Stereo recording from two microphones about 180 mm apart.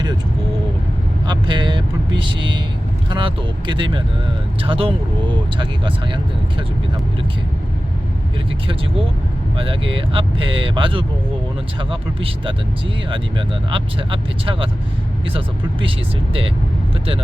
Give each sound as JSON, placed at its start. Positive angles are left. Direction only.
{"t": 1.3, "sound": "vehicle", "side_deg": -25}
{"t": 2.1, "sound": "speech", "side_deg": -25}
{"t": 9.6, "sound": "speech", "side_deg": -30}